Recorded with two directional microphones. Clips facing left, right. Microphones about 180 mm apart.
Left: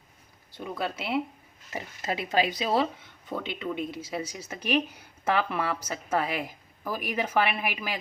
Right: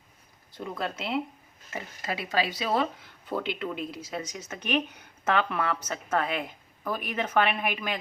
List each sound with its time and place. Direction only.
0.6 s speech: 5° left (ahead or behind)
2.0 s a woman's voice: 20° left (ahead or behind)
3.0 s a woman's voice: centre (ahead or behind)